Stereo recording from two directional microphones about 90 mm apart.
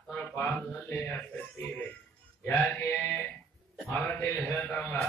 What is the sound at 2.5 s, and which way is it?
Music, 20° left (ahead or behind).